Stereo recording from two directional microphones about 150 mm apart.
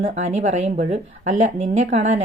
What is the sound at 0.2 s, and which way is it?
A woman's voice, 50° right (ahead or behind).